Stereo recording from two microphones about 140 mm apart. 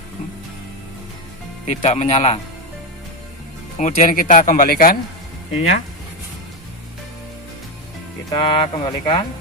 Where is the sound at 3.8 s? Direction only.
65° left (ahead or behind); by 5.0 s 90° left.